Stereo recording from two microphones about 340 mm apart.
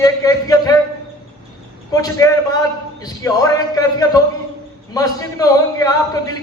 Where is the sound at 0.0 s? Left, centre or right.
Centre.